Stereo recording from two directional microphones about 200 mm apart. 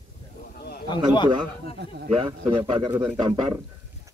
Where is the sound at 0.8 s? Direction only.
25° left (ahead or behind).